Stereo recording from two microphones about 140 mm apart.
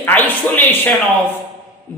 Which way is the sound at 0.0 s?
10° left (ahead or behind).